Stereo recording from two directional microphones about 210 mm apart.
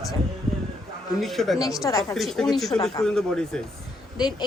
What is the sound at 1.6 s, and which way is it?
Speech, 15° left (ahead or behind).